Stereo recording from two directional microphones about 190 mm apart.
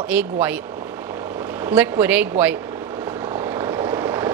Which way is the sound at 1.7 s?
10° right (ahead or behind).